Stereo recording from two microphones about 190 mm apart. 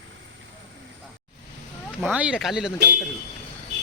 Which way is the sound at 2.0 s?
5° right (ahead or behind).